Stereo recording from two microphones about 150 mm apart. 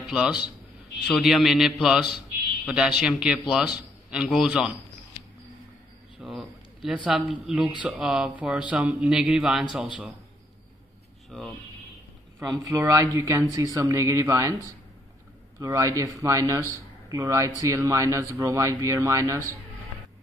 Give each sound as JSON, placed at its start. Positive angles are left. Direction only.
{"t": 0.1, "sound": "a man's voice", "side_deg": -5}
{"t": 6.2, "sound": "a sound", "side_deg": 0}
{"t": 7.1, "sound": "a man's voice", "side_deg": -5}
{"t": 11.2, "sound": "speech", "side_deg": 0}
{"t": 12.4, "sound": "speech", "side_deg": -15}
{"t": 15.6, "sound": "speech", "side_deg": -20}